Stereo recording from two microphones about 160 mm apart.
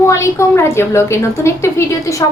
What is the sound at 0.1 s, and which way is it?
A woman's voice, 20° left (ahead or behind).